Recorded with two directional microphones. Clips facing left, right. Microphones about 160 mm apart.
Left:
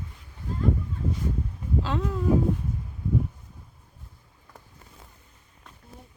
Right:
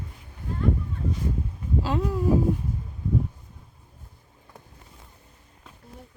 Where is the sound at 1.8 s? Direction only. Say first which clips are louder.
Right 4 dB; 10° right (ahead or behind).